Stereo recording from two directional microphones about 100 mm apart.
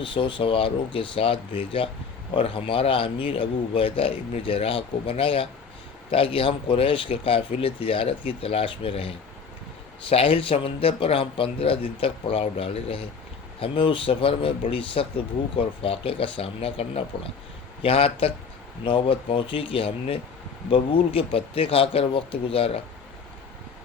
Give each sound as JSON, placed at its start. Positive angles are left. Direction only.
{"t": 0.0, "sound": "a man's voice", "side_deg": 55}